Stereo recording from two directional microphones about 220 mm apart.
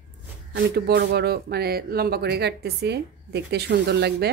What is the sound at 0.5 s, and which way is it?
Speech, 50° right (ahead or behind).